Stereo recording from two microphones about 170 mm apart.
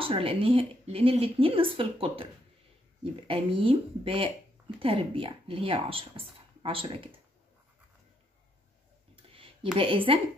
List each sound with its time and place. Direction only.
0.0 s speech: 35° right (ahead or behind)
3.3 s speech: 35° right (ahead or behind)
9.1 s a sound: 30° right (ahead or behind)
9.8 s speech: 30° right (ahead or behind)